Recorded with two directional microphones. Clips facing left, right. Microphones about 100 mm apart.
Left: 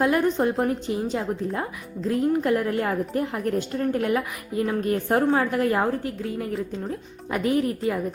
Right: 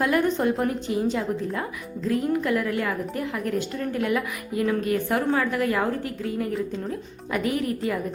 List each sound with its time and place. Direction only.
0.0 s a woman's voice: 25° left (ahead or behind)